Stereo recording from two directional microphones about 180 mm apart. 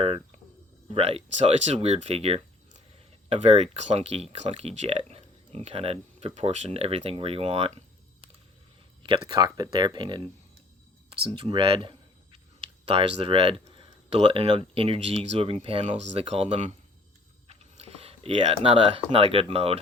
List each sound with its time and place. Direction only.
0.0 s a sound: 35° right (ahead or behind)
0.9 s speech: 35° right (ahead or behind)
9.0 s speech: 25° right (ahead or behind)